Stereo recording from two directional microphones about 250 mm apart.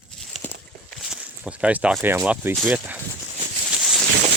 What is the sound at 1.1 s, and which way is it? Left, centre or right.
Speech, centre.